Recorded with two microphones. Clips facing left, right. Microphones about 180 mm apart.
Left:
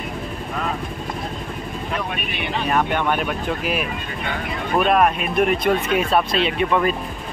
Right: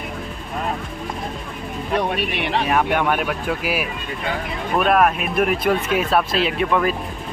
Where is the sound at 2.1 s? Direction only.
80° right.